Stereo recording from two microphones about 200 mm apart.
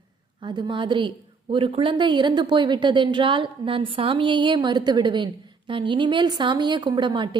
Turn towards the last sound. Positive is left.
turn(degrees=-25)  # may be behind; listen again after turning